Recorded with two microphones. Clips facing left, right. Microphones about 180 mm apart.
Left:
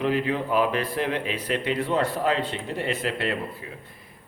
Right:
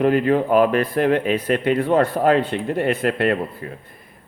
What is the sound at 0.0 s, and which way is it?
Speech, 55° right (ahead or behind).